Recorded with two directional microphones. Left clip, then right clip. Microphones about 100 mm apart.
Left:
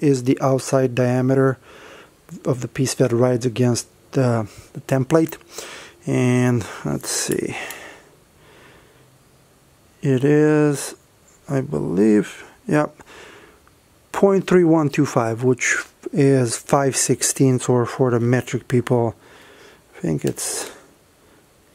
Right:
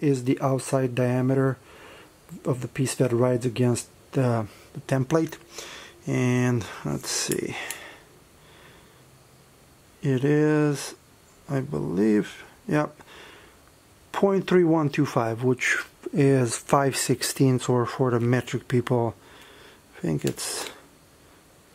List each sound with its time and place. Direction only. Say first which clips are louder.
0.0 s speech: left 6 dB; 45° left (ahead or behind)
9.9 s speech: left 6 dB; 45° left (ahead or behind)
18.3 s a sound: left 5 dB; 35° left (ahead or behind)
20.3 s speech: left 4 dB; 35° left (ahead or behind)